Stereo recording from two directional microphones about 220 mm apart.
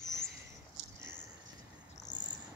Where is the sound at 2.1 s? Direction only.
15° left (ahead or behind).